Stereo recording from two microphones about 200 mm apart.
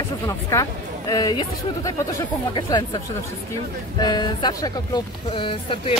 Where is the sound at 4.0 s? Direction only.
20° left (ahead or behind).